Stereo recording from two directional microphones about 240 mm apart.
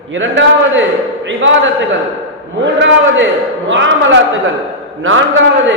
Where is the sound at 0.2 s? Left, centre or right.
Right.